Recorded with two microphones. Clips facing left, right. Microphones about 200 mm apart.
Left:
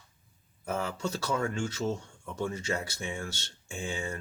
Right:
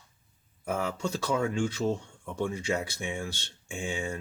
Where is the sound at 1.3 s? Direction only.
15° right (ahead or behind).